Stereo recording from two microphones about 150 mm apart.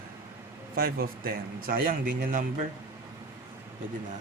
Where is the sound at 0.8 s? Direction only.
90° right; by 2.5 s 70° right (ahead or behind).